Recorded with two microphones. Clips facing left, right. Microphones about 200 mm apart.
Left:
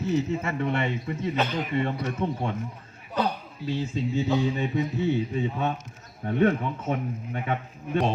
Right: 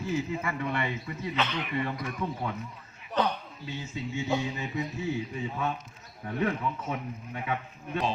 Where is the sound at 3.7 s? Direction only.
35° left (ahead or behind).